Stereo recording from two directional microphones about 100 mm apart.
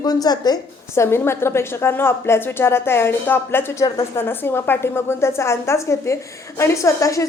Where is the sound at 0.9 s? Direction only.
25° left (ahead or behind).